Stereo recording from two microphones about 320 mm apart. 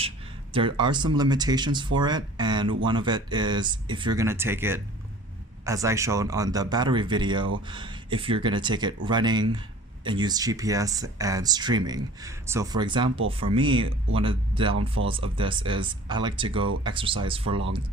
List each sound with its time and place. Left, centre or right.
0.5 s speech: centre